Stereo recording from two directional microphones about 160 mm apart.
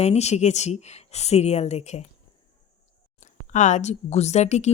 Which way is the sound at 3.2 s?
50° left (ahead or behind).